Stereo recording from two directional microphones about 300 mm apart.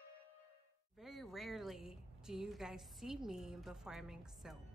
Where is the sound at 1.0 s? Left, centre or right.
Centre.